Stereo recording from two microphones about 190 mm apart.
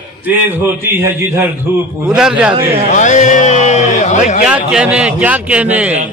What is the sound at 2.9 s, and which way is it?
Speech, 40° left (ahead or behind).